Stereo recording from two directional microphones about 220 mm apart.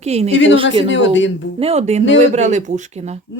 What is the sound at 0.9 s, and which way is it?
Speech, 55° left (ahead or behind).